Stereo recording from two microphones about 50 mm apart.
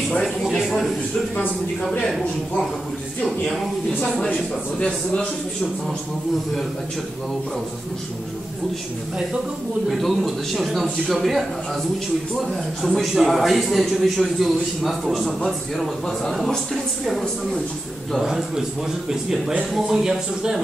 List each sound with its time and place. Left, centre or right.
0.2 s a man's voice: centre
0.6 s a sound: centre
3.3 s a man's voice: centre; by 5.3 s left
9.8 s a man's voice: centre
12.4 s a man's voice: centre